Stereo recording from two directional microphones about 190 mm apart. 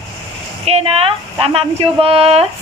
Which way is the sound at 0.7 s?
30° right (ahead or behind).